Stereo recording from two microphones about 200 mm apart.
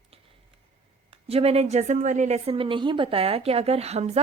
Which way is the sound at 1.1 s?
30° right (ahead or behind).